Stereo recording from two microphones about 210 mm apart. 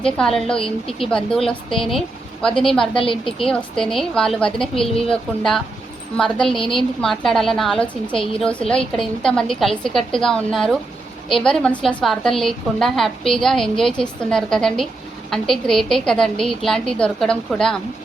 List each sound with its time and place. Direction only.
0.0 s a woman's voice: 5° left (ahead or behind)
0.5 s a woman's voice: 25° left (ahead or behind)
1.0 s a woman's voice: centre (ahead or behind)
2.9 s a woman's voice: 25° left (ahead or behind)
3.2 s a woman's voice: centre (ahead or behind)